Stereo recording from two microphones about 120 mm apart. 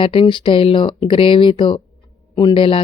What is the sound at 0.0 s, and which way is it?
Speech, 50° left (ahead or behind).